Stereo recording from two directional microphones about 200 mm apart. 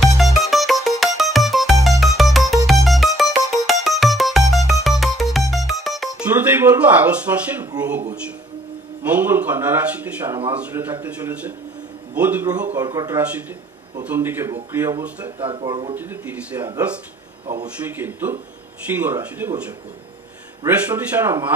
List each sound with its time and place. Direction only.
0.0 s music: centre (ahead or behind)
7.5 s speech: 10° right (ahead or behind)
9.0 s speech: 10° right (ahead or behind)
15.3 s speech: 25° right (ahead or behind)
16.0 s speech: 10° right (ahead or behind)
20.6 s speech: 10° right (ahead or behind)